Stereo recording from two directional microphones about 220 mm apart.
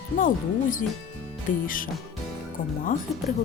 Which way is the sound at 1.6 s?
40° left (ahead or behind).